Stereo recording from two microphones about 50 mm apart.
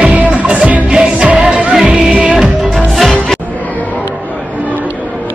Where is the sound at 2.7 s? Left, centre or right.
Centre.